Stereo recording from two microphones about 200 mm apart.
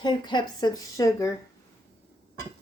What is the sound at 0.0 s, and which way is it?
A woman's voice, 20° left (ahead or behind).